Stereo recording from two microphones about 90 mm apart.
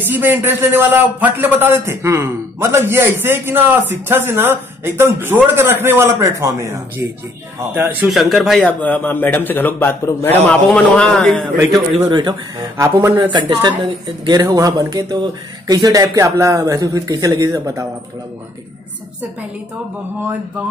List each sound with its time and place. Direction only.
0.0 s speech: 20° right (ahead or behind)
7.7 s speech: 20° right (ahead or behind)
8.1 s speech: centre (ahead or behind)
8.6 s speech: 15° left (ahead or behind)
10.5 s a man's voice: 10° left (ahead or behind)
12.1 s a woman's voice: 55° right (ahead or behind)
13.0 s speech: 25° right (ahead or behind)
13.3 s a woman's voice: 55° right (ahead or behind); by 17.8 s 35° right (ahead or behind)